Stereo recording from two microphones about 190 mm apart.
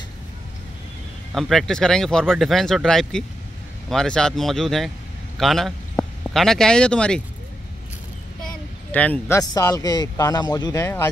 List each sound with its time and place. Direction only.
1.3 s a man's voice: centre (ahead or behind)
8.9 s speech: 10° left (ahead or behind)